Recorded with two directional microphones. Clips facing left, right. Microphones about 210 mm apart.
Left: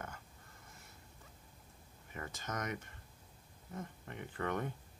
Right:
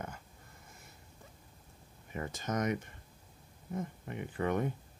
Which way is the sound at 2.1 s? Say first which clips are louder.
Right 7 dB; 20° right (ahead or behind).